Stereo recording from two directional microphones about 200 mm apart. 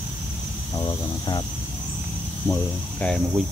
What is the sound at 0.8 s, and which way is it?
Speech, 20° left (ahead or behind).